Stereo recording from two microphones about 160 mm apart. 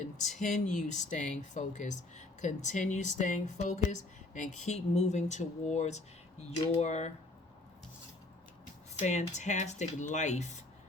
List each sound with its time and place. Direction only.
0.0 s speech: 50° left (ahead or behind)
9.0 s speech: 45° left (ahead or behind)